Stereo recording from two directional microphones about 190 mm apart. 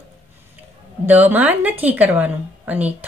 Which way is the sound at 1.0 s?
10° right (ahead or behind).